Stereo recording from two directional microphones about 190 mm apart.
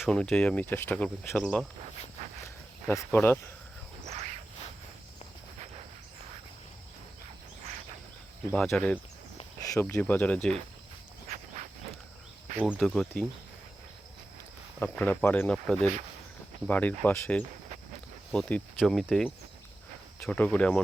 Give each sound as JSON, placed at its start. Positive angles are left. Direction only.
{"t": 0.0, "sound": "speech", "side_deg": 5}
{"t": 2.9, "sound": "speech", "side_deg": 10}
{"t": 4.0, "sound": "cricket", "side_deg": -35}
{"t": 8.5, "sound": "speech", "side_deg": 5}
{"t": 9.6, "sound": "speech", "side_deg": 15}
{"t": 12.7, "sound": "speech", "side_deg": 0}
{"t": 14.8, "sound": "speech", "side_deg": 10}